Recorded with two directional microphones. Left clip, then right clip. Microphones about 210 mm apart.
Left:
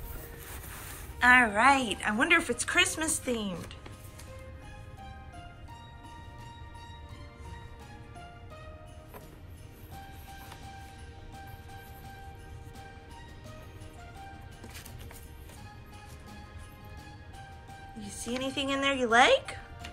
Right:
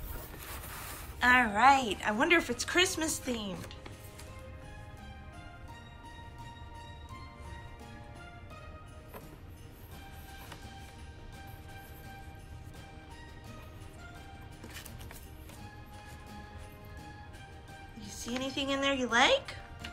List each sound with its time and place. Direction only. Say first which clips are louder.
0.6 s a sound: right 3 dB; 30° right (ahead or behind)
1.2 s a woman's voice: left 2 dB; 10° right (ahead or behind)
18.0 s speech: left 3 dB; centre (ahead or behind)